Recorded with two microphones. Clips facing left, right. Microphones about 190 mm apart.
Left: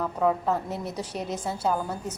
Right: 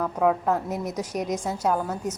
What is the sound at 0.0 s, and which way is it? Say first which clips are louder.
A woman's voice: right 2 dB; 5° right (ahead or behind).